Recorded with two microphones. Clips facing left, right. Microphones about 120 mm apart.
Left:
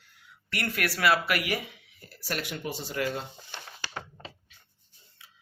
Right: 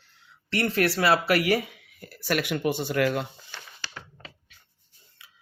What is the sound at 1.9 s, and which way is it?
Speech, 60° right (ahead or behind).